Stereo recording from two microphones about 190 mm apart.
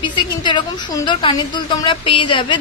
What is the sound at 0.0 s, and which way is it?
Speech, 25° left (ahead or behind).